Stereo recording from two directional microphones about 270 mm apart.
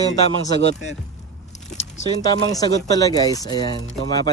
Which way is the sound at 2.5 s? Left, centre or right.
Centre.